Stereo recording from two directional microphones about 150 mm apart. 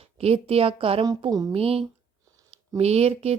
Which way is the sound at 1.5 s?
40° right (ahead or behind).